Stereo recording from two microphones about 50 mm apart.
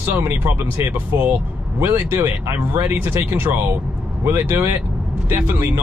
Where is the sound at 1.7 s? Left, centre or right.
Right.